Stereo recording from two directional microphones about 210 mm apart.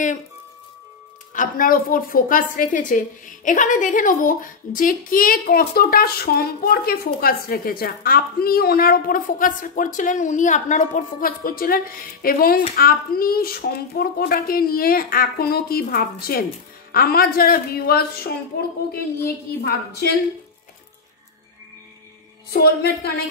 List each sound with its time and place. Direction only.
1.3 s a woman's voice: 40° left (ahead or behind)
22.5 s a child's voice: 45° left (ahead or behind)